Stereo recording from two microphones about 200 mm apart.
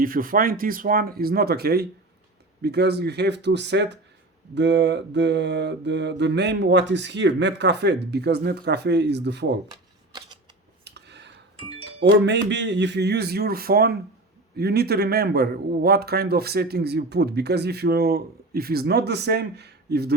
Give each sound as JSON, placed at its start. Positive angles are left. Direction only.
{"t": 0.0, "sound": "a man's voice", "side_deg": -45}
{"t": 2.6, "sound": "mantra", "side_deg": -55}
{"t": 10.8, "sound": "a sound", "side_deg": -60}
{"t": 11.5, "sound": "music", "side_deg": -30}
{"t": 11.9, "sound": "speech", "side_deg": -60}
{"t": 12.5, "sound": "mantra", "side_deg": -60}
{"t": 14.5, "sound": "a man's voice", "side_deg": -55}